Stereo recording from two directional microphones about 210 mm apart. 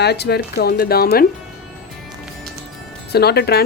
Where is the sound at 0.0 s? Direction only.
50° left (ahead or behind).